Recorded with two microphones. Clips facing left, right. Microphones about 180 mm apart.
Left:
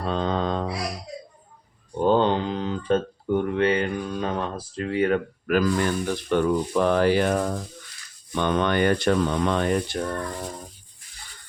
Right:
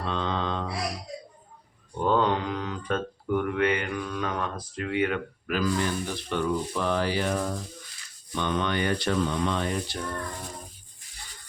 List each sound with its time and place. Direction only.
0.0 s mantra: 40° left (ahead or behind)
2.0 s a sound: 30° left (ahead or behind); by 7.5 s 55° left (ahead or behind)
8.4 s speech: 55° left (ahead or behind)